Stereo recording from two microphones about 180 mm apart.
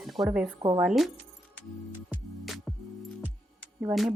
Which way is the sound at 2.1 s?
Centre (ahead or behind).